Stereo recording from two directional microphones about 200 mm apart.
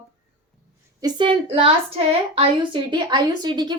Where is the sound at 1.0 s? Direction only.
25° right (ahead or behind).